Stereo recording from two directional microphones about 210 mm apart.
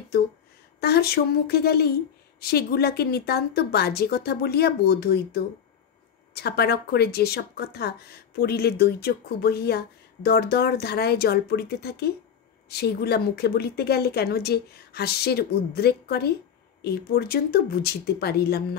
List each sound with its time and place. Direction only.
0.7 s speech: 50° left (ahead or behind)